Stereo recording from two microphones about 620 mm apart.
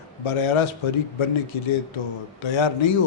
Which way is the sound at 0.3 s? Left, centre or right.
Left.